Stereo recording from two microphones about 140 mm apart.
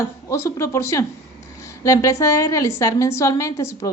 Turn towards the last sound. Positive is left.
turn(degrees=20)  # may be behind; listen again after turning